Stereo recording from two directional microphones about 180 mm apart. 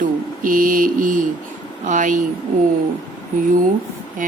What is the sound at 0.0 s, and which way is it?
Mantra, 50° right (ahead or behind).